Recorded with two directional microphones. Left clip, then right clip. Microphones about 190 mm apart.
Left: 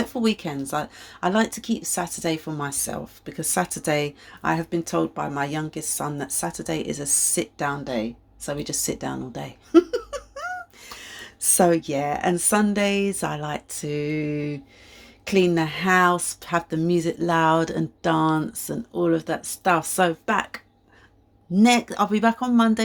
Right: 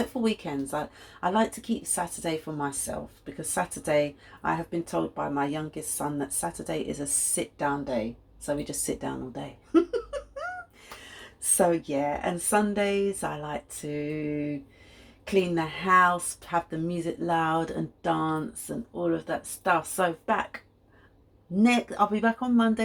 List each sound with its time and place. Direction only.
0.1 s speech: 50° left (ahead or behind)
11.2 s speech: 50° left (ahead or behind)
21.6 s speech: 45° left (ahead or behind)